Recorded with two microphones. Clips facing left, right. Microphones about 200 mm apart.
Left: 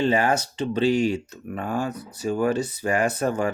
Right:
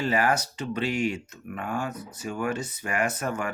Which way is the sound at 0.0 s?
25° left (ahead or behind).